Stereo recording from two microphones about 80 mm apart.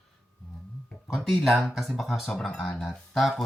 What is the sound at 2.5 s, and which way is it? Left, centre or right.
Speech, centre.